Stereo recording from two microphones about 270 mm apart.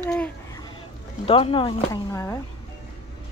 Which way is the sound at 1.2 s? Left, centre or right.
Centre.